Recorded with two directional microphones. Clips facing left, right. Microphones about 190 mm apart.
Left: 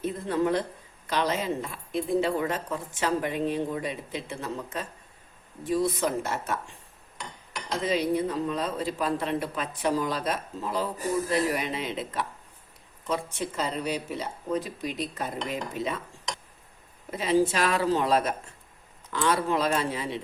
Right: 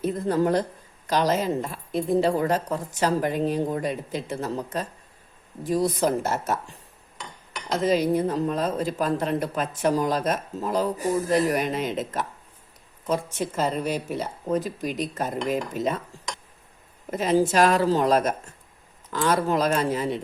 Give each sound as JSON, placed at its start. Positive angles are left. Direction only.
{"t": 0.0, "sound": "a woman's voice", "side_deg": -40}
{"t": 7.7, "sound": "speech", "side_deg": -45}
{"t": 17.1, "sound": "speech", "side_deg": -45}